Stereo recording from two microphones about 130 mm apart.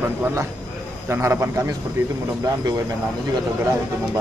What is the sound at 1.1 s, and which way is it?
Speech, 20° right (ahead or behind).